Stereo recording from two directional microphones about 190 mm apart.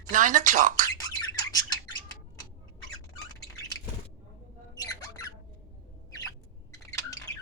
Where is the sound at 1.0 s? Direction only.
20° left (ahead or behind).